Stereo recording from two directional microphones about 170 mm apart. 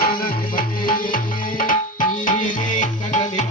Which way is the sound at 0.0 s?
60° left (ahead or behind).